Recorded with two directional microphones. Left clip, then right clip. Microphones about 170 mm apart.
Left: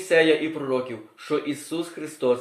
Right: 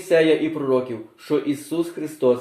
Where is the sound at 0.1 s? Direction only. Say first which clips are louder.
Right 2 dB; 25° left (ahead or behind).